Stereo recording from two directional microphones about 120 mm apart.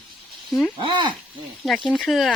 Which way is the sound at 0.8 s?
40° right (ahead or behind).